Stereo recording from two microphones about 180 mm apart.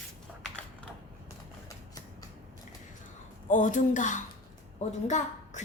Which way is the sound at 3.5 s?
45° left (ahead or behind).